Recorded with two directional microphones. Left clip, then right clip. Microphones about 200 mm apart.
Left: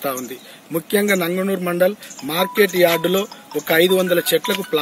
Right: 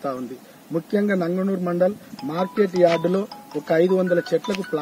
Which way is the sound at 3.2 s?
Centre (ahead or behind).